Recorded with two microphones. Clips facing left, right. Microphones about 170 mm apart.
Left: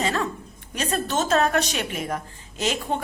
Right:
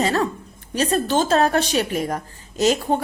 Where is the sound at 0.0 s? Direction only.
40° right (ahead or behind).